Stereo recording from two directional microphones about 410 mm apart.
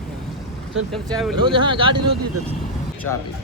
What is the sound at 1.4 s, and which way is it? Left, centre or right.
Speech, centre.